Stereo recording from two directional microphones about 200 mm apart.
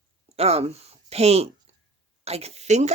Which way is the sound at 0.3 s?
30° right (ahead or behind).